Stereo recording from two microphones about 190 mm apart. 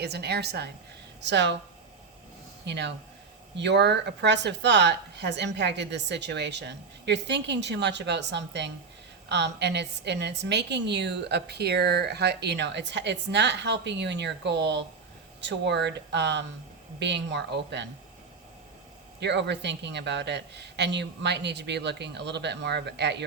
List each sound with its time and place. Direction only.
0.0 s a woman's voice: 60° right (ahead or behind)
2.6 s a woman's voice: 65° right (ahead or behind)
19.2 s a woman's voice: 65° right (ahead or behind)